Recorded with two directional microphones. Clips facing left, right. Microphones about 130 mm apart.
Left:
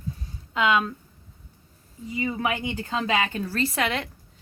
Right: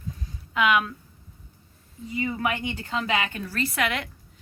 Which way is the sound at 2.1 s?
20° left (ahead or behind).